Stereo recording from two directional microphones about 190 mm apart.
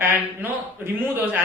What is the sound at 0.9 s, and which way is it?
Speech, 10° right (ahead or behind).